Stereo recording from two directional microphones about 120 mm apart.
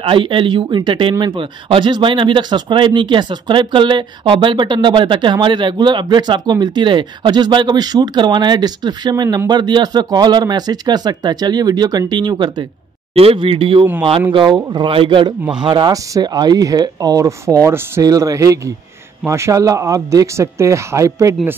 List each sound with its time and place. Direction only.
0.0 s speech: 45° right (ahead or behind)
13.1 s speech: 55° right (ahead or behind); by 21.4 s 25° right (ahead or behind)